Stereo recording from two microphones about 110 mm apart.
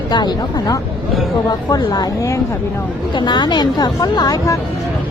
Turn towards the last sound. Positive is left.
turn(degrees=35)  # may be behind; listen again after turning